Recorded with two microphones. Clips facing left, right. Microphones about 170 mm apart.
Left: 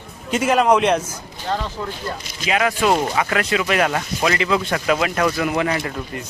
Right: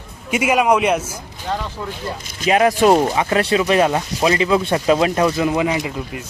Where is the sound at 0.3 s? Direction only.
10° right (ahead or behind).